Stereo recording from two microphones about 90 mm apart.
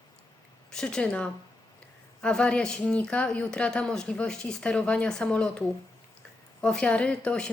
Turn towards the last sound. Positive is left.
turn(degrees=10)  # may be behind; listen again after turning